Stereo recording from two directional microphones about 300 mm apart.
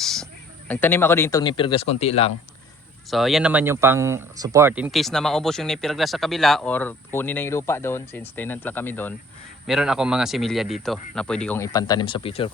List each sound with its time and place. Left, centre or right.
0.0 s a sound: centre
0.7 s speech: centre
3.1 s speech: centre